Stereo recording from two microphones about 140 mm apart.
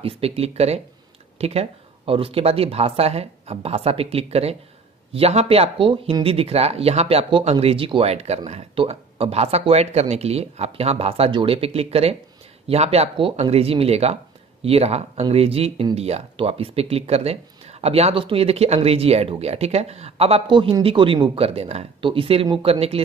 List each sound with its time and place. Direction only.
0.0 s speech: 45° right (ahead or behind)